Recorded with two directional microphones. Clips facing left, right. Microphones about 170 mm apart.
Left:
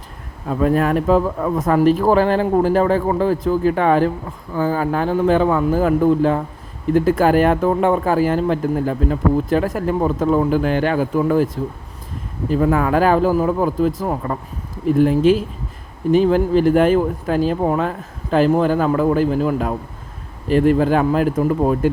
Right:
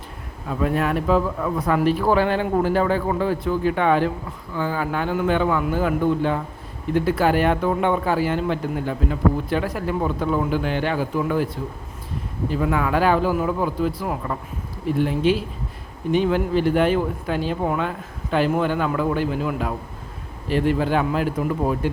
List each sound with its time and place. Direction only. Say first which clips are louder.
0.4 s speech: left 5 dB; 40° left (ahead or behind)